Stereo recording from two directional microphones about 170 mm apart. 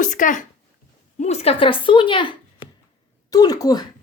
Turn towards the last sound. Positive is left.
turn(degrees=25)  # may be behind; listen again after turning